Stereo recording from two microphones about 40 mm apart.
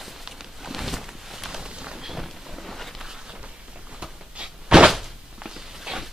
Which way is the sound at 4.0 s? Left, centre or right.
Centre.